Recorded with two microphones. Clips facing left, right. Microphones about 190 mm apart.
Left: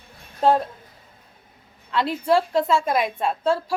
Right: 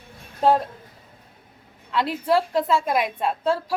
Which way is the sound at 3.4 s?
15° left (ahead or behind).